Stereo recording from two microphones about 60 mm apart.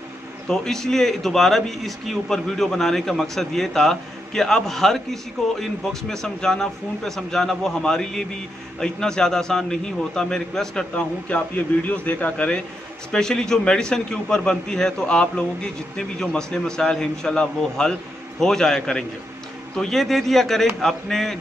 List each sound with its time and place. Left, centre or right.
0.5 s a man's voice: centre
13.1 s a man's voice: centre